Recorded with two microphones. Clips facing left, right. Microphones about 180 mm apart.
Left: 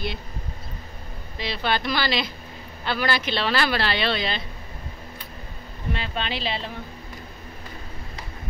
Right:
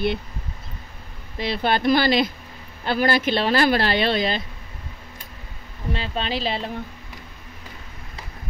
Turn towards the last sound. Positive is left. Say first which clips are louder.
# right 3 dB
turn(degrees=-40)  # may be behind; listen again after turning